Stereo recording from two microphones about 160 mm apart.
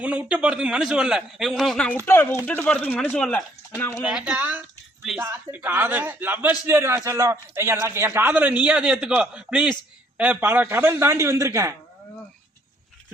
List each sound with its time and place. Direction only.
0.0 s a man's voice: 10° right (ahead or behind)
3.8 s speech: 15° left (ahead or behind)
4.0 s a man's voice: 5° right (ahead or behind)